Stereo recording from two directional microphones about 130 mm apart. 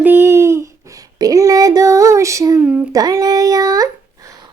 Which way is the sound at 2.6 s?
5° right (ahead or behind).